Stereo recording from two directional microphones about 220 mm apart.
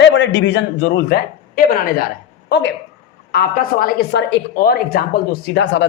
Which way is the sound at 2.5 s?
55° left (ahead or behind).